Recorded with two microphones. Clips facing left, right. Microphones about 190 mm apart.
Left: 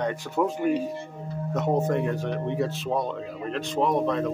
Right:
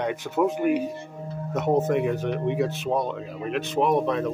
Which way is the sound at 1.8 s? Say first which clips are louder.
Right 2 dB; 5° right (ahead or behind).